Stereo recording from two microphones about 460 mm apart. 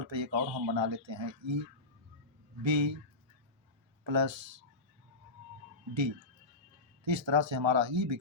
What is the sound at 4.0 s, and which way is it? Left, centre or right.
Speech, right.